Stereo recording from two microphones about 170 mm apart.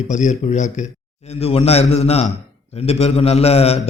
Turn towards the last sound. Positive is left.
turn(degrees=35)  # may be behind; listen again after turning